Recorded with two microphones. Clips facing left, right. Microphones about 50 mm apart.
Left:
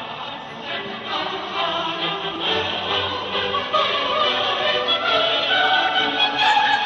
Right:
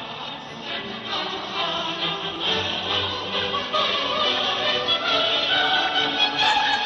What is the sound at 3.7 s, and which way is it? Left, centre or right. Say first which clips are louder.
Opera: left 4 dB; centre.